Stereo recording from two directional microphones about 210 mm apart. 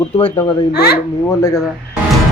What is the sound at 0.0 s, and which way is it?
Speech, 25° left (ahead or behind).